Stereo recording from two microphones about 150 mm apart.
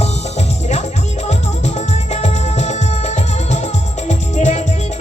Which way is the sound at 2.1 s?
50° left (ahead or behind).